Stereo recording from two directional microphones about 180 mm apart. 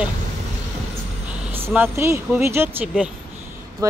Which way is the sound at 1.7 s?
15° right (ahead or behind).